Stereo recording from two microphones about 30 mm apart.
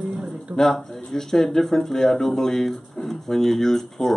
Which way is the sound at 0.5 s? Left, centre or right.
Right.